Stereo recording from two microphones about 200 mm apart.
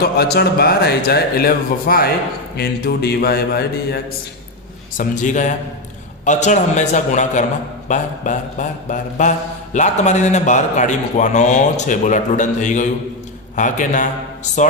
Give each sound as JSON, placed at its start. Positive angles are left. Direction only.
{"t": 0.0, "sound": "speech", "side_deg": 50}
{"t": 4.9, "sound": "a man's voice", "side_deg": 40}